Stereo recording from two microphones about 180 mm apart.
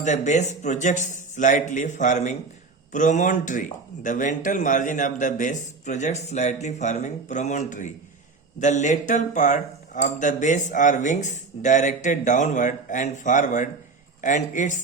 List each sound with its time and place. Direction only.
0.0 s speech: 40° left (ahead or behind)